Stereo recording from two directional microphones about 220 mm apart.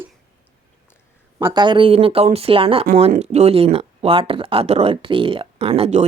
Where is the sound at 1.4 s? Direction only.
15° right (ahead or behind).